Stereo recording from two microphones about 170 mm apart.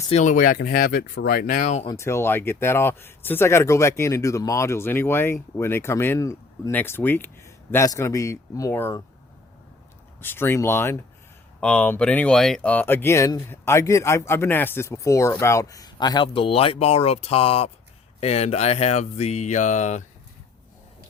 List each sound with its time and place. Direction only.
0.1 s speech: 45° left (ahead or behind)
1.9 s speech: 15° left (ahead or behind)
10.2 s speech: 15° left (ahead or behind); by 20.1 s 45° left (ahead or behind)